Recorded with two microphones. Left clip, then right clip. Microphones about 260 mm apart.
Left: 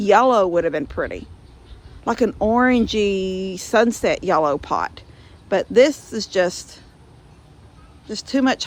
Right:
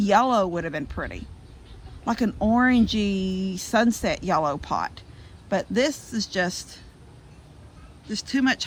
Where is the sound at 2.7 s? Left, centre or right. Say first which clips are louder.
Left 5 dB; left.